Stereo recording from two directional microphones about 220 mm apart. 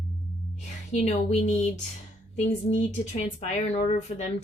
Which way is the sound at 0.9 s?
30° left (ahead or behind).